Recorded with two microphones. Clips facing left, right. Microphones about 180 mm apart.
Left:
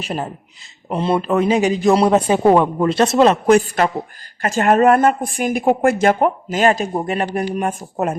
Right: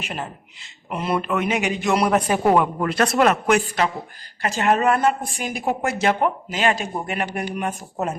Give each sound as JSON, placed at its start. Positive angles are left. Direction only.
{"t": 0.0, "sound": "a man's voice", "side_deg": 35}
{"t": 4.4, "sound": "a woman's voice", "side_deg": 50}
{"t": 7.7, "sound": "a woman's voice", "side_deg": 55}